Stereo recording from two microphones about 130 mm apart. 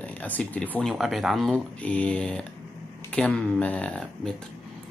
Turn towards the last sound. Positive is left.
turn(degrees=5)  # may be behind; listen again after turning